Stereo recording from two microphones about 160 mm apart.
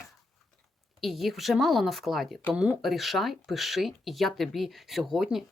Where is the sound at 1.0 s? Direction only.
Centre (ahead or behind).